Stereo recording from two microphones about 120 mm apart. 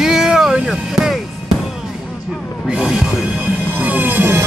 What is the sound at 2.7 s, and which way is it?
Speech, 5° right (ahead or behind).